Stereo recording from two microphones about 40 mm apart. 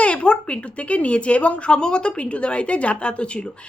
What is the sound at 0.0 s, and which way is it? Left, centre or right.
Speech, left.